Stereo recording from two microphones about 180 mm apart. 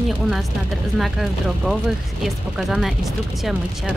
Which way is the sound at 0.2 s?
Centre (ahead or behind).